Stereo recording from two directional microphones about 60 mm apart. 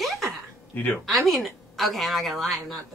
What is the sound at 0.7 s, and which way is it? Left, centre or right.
Speech, left.